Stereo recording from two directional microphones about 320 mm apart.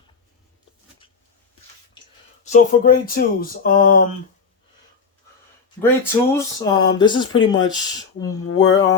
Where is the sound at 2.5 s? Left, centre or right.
Left.